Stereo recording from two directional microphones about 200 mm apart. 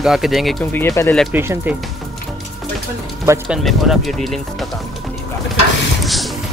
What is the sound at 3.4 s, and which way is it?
Speech, centre (ahead or behind).